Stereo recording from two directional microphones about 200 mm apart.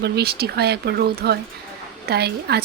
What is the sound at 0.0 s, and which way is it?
Speech, 55° right (ahead or behind).